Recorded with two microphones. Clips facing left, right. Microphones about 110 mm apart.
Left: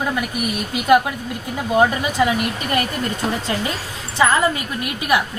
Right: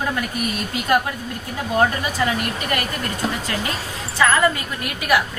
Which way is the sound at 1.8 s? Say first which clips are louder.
Left 3 dB; 10° left (ahead or behind).